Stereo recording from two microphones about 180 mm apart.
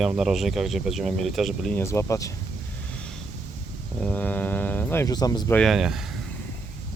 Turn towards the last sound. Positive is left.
turn(degrees=0)  # may be behind; listen again after turning